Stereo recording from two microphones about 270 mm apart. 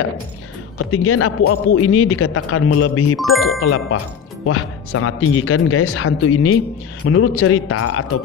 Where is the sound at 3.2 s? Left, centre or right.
Centre.